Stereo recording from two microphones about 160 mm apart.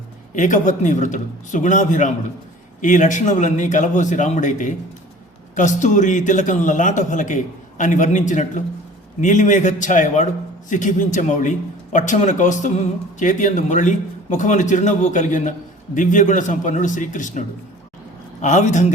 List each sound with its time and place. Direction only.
0.3 s speech: 50° left (ahead or behind)
18.4 s speech: 45° left (ahead or behind)